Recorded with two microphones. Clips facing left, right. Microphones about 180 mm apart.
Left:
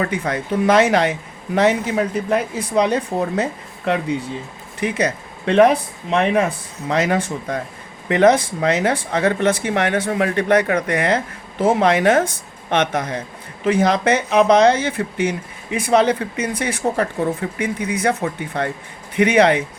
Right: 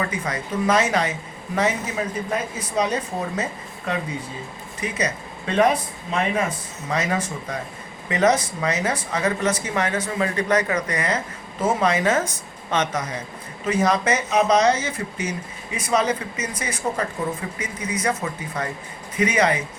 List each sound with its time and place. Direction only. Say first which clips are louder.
0.0 s speech: left 5 dB; 60° left (ahead or behind)